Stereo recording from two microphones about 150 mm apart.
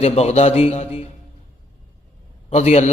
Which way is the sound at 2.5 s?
45° left (ahead or behind).